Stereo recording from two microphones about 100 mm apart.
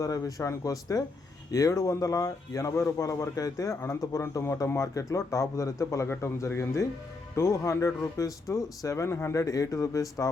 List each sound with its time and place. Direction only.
0.0 s speech: 35° left (ahead or behind)